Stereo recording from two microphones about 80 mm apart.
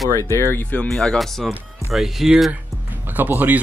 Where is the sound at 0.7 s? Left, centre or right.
Centre.